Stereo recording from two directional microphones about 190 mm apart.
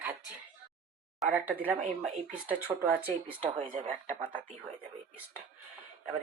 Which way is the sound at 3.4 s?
30° right (ahead or behind).